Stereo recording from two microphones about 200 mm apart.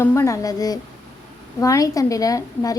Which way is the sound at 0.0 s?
15° left (ahead or behind).